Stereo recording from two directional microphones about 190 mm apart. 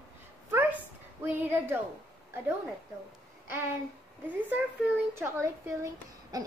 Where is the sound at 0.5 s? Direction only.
10° right (ahead or behind).